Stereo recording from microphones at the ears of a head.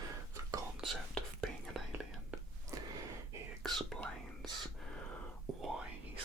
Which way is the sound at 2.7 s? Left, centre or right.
Right.